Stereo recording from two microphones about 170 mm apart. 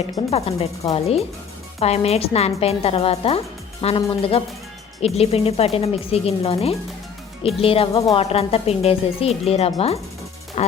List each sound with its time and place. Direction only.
0.2 s a woman's voice: 35° left (ahead or behind)